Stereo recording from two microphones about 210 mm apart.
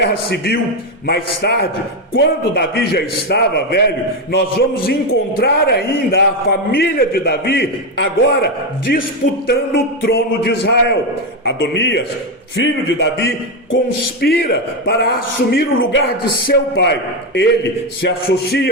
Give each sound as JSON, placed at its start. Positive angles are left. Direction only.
{"t": 0.0, "sound": "a man's voice", "side_deg": 50}
{"t": 18.3, "sound": "a man's voice", "side_deg": 50}